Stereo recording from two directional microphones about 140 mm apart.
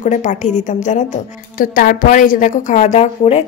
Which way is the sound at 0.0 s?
60° left (ahead or behind).